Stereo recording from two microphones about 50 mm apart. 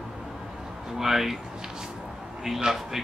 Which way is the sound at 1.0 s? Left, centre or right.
Centre.